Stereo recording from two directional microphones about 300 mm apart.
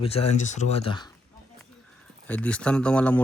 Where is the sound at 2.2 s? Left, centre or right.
Centre.